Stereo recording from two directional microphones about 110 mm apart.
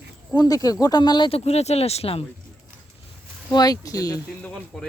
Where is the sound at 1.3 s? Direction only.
70° left (ahead or behind).